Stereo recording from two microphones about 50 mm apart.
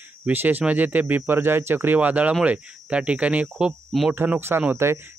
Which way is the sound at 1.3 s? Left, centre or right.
Right.